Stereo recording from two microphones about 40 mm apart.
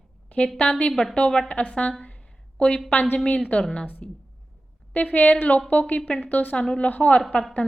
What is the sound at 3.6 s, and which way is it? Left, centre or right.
Speech, left.